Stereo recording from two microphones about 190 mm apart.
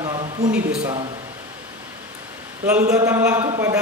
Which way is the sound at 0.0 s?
30° right (ahead or behind).